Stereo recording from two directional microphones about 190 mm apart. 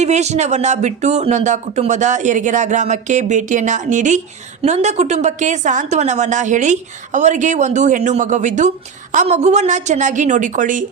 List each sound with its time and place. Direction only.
0.0 s speech: 35° right (ahead or behind)